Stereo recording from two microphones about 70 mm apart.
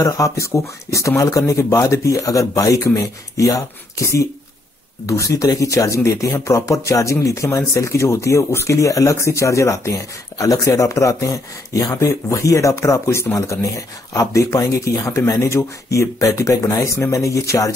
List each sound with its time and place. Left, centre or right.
0.0 s speech: left